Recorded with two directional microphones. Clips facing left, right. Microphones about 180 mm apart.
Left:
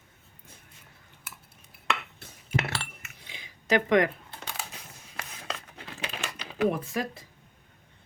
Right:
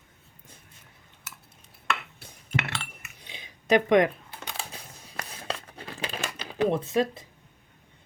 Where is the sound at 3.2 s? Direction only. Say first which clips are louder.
Right 4 dB; 20° right (ahead or behind).